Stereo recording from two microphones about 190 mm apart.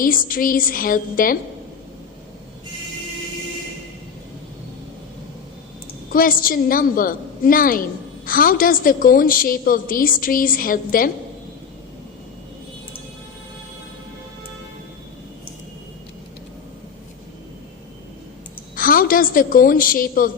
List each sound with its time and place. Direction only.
0.0 s a woman's voice: 50° left (ahead or behind)
6.1 s a woman's voice: 45° left (ahead or behind)
18.8 s a woman's voice: 50° left (ahead or behind)